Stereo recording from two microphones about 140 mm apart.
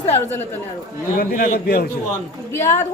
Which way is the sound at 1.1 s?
90° left.